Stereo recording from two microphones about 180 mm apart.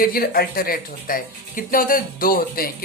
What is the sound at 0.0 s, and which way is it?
Speech, 55° left (ahead or behind).